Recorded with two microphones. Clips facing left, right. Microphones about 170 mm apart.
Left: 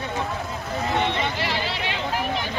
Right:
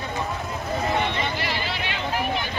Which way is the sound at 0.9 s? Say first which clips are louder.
Left 1 dB; 25° left (ahead or behind).